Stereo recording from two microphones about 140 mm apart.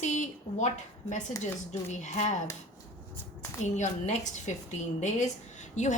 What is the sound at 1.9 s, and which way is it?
Speech, 55° left (ahead or behind).